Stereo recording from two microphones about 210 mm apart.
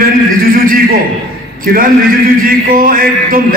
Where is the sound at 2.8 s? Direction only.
40° right (ahead or behind).